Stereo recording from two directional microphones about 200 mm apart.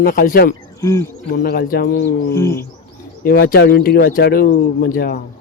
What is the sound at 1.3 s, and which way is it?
Speech, 50° left (ahead or behind).